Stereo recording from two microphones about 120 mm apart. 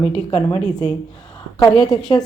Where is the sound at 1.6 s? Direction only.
35° left (ahead or behind).